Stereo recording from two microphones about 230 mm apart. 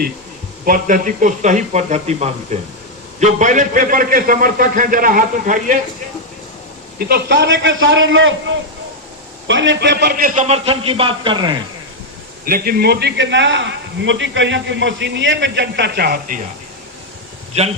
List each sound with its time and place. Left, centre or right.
0.6 s a man's voice: right
7.0 s a man's voice: right
12.5 s a man's voice: right